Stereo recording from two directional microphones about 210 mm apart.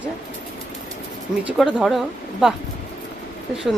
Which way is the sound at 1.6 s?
Centre (ahead or behind).